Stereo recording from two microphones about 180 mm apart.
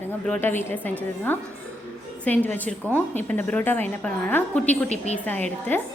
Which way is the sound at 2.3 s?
10° left (ahead or behind).